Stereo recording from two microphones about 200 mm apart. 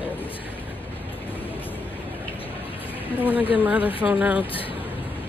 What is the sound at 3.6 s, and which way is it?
Speech, 5° right (ahead or behind).